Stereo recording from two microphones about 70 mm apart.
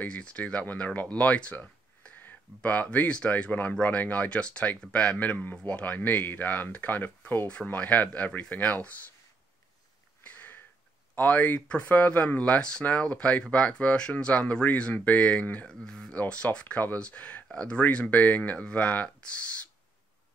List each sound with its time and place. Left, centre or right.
0.0 s speech: centre
10.2 s sniff: left
11.1 s speech: left